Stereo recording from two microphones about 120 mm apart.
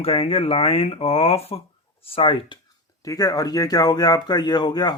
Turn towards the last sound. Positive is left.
turn(degrees=35)  # may be behind; listen again after turning